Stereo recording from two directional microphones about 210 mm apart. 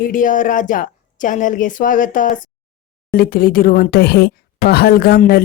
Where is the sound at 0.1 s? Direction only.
40° left (ahead or behind).